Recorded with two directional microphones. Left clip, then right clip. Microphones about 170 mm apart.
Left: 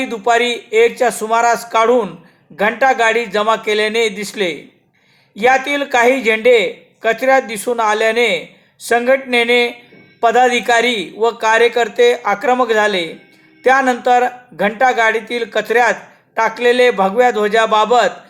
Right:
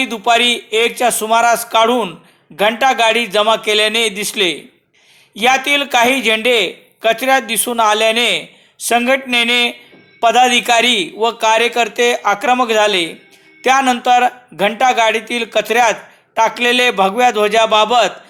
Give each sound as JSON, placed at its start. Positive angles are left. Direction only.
{"t": 0.0, "sound": "speech", "side_deg": -25}